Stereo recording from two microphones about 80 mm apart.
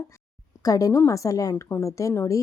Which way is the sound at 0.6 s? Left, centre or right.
Left.